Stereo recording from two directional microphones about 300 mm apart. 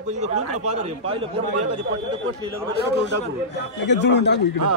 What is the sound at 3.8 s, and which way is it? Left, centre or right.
Speech, left.